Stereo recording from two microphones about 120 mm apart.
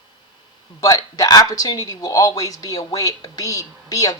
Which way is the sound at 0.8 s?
35° left (ahead or behind).